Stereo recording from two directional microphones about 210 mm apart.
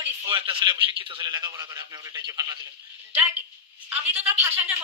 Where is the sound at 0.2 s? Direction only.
25° right (ahead or behind).